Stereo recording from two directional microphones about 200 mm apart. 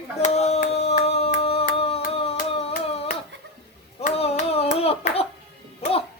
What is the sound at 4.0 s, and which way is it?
Hands, 35° left (ahead or behind).